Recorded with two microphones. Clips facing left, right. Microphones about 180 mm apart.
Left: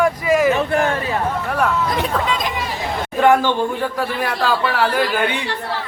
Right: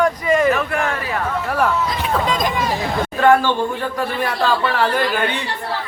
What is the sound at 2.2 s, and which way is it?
Speech, 45° right (ahead or behind).